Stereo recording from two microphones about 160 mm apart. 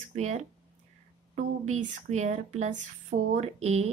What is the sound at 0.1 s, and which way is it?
Speech, 45° right (ahead or behind).